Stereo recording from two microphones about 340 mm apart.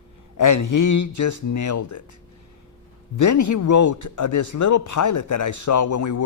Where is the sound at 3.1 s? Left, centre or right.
Left.